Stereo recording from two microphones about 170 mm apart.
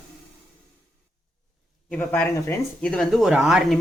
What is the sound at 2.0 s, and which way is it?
Speech, 10° left (ahead or behind).